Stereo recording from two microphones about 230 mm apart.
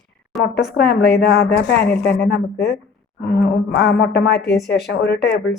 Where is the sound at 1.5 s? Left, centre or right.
Left.